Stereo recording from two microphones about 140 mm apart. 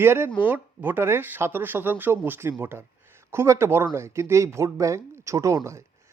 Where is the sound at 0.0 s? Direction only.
15° right (ahead or behind).